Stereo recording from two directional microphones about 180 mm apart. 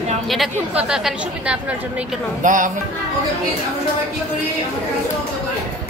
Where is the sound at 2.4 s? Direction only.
45° right (ahead or behind).